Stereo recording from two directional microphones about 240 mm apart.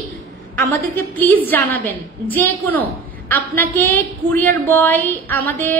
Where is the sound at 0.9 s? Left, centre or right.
Centre.